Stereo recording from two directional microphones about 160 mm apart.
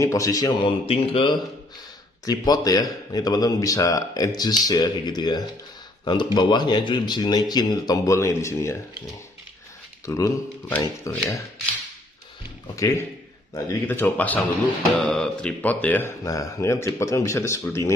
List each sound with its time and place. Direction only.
0.0 s speech: 20° left (ahead or behind)
12.8 s speech: 20° left (ahead or behind)